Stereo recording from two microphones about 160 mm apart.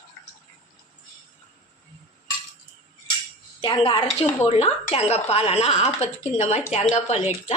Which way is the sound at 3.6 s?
35° left (ahead or behind).